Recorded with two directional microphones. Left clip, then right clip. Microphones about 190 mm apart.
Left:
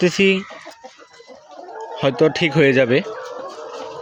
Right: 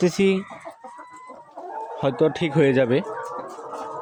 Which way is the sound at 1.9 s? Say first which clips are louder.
Left 5 dB; centre (ahead or behind).